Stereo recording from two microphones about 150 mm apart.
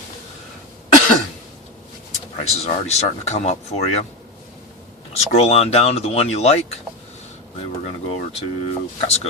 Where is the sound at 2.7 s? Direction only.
45° left (ahead or behind).